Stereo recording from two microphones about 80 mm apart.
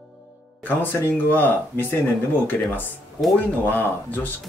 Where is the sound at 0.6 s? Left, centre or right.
Left.